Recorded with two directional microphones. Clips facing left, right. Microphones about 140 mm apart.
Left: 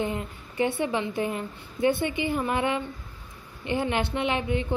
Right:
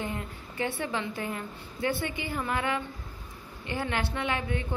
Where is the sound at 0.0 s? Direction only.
20° left (ahead or behind).